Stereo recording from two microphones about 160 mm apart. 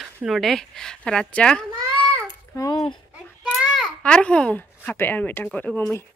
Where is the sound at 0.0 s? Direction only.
Centre (ahead or behind).